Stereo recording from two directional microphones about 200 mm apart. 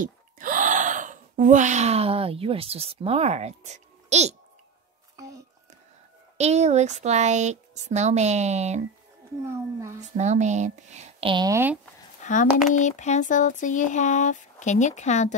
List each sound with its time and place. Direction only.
0.0 s speech: 40° right (ahead or behind)
6.3 s speech: 35° right (ahead or behind)
9.9 s speech: 35° right (ahead or behind); by 11.8 s 10° right (ahead or behind)
12.2 s speech: 40° left (ahead or behind)